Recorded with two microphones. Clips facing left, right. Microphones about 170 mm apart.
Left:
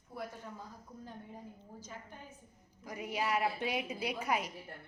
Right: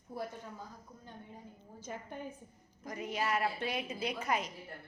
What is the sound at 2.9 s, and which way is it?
A woman's voice, 10° left (ahead or behind).